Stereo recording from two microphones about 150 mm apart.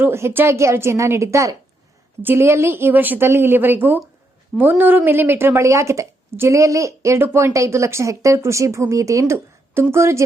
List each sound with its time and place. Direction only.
0.0 s a woman's voice: 15° right (ahead or behind)